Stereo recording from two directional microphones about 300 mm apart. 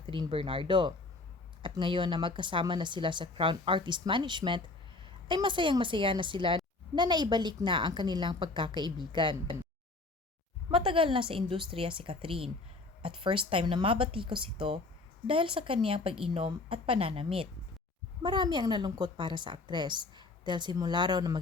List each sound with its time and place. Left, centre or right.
0.1 s a woman's voice: centre
10.7 s a woman's voice: centre